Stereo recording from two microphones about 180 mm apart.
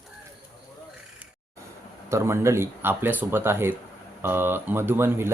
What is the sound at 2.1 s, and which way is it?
Speech, 15° right (ahead or behind).